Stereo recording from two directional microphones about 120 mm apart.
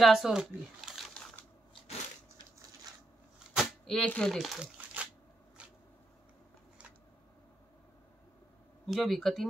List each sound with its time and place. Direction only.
0.0 s speech: centre (ahead or behind)
3.5 s speech: 5° left (ahead or behind)
8.8 s speech: centre (ahead or behind)